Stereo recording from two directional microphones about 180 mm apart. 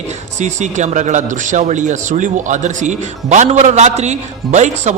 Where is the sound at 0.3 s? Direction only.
40° right (ahead or behind).